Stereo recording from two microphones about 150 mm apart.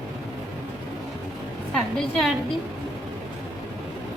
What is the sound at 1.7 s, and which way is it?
Speech, 5° left (ahead or behind).